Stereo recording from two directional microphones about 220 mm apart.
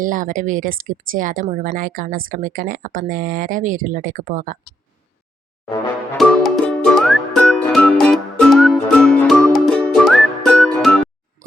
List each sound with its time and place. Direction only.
0.0 s speech: 35° right (ahead or behind)
6.1 s music: centre (ahead or behind)